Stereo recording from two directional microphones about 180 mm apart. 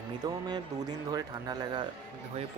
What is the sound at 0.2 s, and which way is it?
Speech, 20° right (ahead or behind).